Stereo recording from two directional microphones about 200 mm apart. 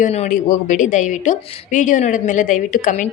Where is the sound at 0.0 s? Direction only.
35° left (ahead or behind).